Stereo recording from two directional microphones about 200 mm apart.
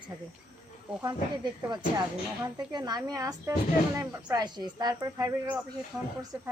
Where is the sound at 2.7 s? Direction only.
20° right (ahead or behind).